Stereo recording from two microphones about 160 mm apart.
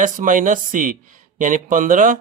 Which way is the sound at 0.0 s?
55° right (ahead or behind).